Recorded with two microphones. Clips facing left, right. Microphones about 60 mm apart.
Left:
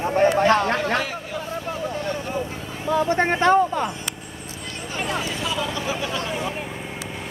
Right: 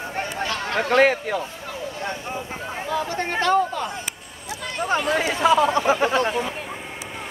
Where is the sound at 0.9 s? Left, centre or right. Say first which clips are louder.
Right 8 dB; right.